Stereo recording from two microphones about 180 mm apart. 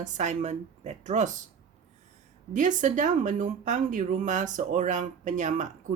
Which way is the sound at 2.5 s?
45° right (ahead or behind).